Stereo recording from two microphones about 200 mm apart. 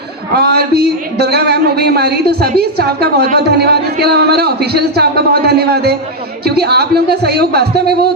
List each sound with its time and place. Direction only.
0.3 s a man's voice: 55° right (ahead or behind)